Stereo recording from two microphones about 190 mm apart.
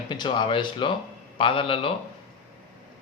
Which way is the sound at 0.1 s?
25° left (ahead or behind).